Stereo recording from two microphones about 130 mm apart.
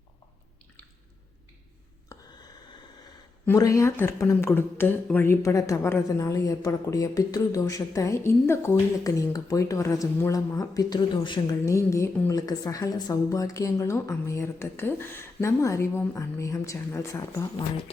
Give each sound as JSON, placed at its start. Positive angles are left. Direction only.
{"t": 3.4, "sound": "speech", "side_deg": 25}
{"t": 11.6, "sound": "speech", "side_deg": 20}